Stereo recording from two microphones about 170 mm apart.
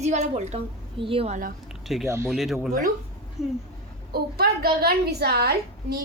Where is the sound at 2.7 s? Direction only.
55° right (ahead or behind).